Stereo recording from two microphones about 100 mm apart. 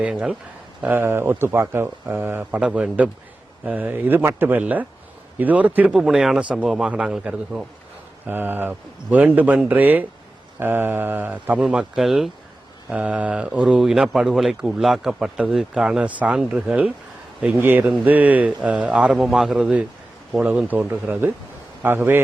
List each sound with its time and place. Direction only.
0.0 s speech: 10° right (ahead or behind)
8.3 s speech: 20° right (ahead or behind); by 12.3 s 5° right (ahead or behind)
12.9 s speech: 15° right (ahead or behind)